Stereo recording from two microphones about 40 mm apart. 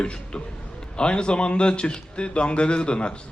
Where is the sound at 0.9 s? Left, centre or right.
Left.